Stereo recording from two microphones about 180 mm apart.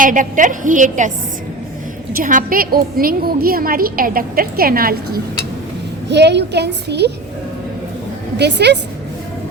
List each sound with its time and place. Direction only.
0.0 s a woman's voice: 45° right (ahead or behind)
2.1 s a woman's voice: 50° right (ahead or behind)
6.1 s a woman's voice: 70° right (ahead or behind)
8.4 s a woman's voice: 70° right (ahead or behind)